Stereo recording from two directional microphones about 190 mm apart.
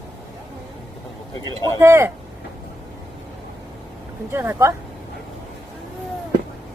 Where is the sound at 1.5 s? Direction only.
20° left (ahead or behind).